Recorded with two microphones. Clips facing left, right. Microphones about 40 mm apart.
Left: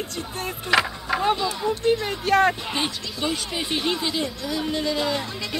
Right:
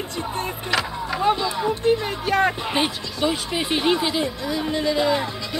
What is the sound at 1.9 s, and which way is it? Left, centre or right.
Speech, centre.